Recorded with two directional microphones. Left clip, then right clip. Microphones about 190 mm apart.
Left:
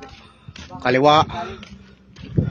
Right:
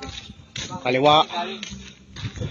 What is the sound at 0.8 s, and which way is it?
Speech, 35° left (ahead or behind).